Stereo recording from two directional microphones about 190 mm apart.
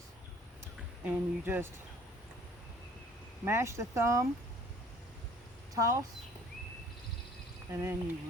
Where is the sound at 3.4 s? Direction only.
15° right (ahead or behind).